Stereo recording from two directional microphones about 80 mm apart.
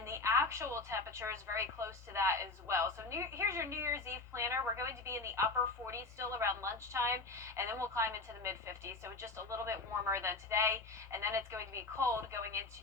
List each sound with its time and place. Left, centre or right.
0.0 s a woman's voice: right